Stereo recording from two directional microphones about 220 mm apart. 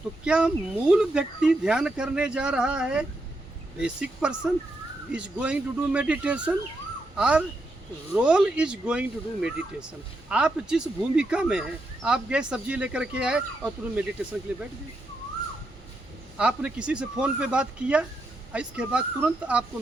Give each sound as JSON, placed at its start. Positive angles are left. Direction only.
{"t": 0.3, "sound": "speech", "side_deg": -5}
{"t": 16.4, "sound": "speech", "side_deg": -5}